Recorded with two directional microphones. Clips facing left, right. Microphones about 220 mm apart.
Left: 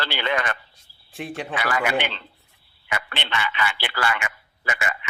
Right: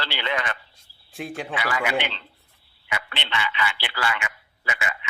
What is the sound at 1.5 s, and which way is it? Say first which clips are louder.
A man's voice: left 2 dB; 50° left (ahead or behind).